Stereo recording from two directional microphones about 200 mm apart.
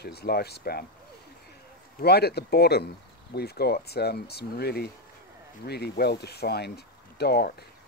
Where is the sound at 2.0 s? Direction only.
55° left (ahead or behind).